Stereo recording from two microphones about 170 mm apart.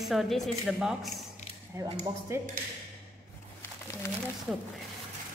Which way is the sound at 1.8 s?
15° right (ahead or behind).